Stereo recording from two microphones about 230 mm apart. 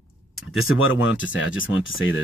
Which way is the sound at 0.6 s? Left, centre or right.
Left.